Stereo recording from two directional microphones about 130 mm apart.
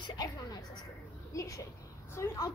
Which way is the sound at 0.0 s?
30° left (ahead or behind).